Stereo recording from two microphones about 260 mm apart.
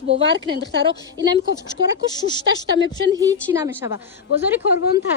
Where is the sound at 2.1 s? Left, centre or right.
Centre.